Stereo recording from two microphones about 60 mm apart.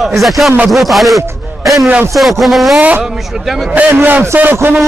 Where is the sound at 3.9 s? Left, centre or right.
Right.